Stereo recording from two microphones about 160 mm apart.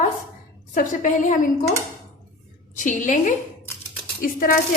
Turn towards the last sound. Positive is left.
turn(degrees=65)  # may be behind; listen again after turning